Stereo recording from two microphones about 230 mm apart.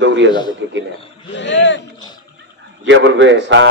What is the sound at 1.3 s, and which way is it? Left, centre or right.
Speech, left.